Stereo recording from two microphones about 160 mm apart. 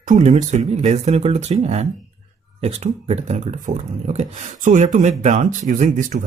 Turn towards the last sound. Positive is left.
turn(degrees=-50)  # may be behind; listen again after turning